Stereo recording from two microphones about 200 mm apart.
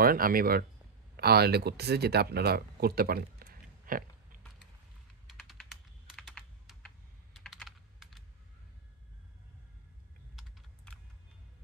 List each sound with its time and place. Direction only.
0.0 s speech: 45° right (ahead or behind)
5.4 s typing: centre (ahead or behind)
7.3 s computer keyboard: centre (ahead or behind)